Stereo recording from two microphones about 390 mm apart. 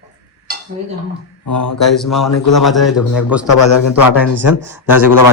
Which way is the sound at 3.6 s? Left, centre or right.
Left.